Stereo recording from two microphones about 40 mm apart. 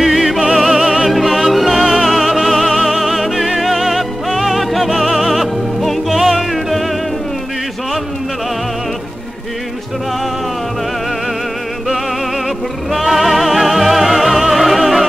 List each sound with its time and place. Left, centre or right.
0.0 s music: centre
12.9 s music: centre